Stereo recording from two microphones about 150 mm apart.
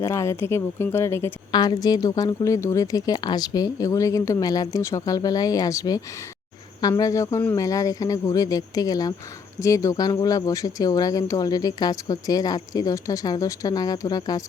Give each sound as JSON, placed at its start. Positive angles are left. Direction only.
{"t": 0.0, "sound": "speech", "side_deg": 20}